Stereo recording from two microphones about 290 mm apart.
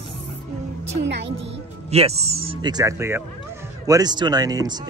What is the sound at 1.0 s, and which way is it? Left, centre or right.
Speech, right.